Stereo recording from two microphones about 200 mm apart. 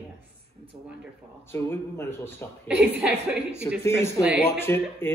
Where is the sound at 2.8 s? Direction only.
5° right (ahead or behind).